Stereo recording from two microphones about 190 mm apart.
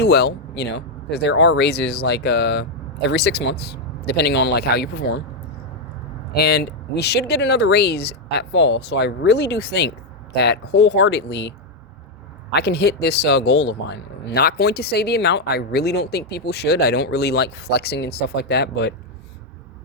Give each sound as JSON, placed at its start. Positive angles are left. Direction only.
{"t": 0.0, "sound": "speech", "side_deg": 60}
{"t": 6.3, "sound": "speech", "side_deg": 55}
{"t": 12.5, "sound": "speech", "side_deg": 60}